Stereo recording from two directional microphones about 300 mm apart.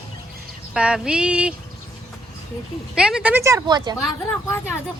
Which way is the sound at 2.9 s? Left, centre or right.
Centre.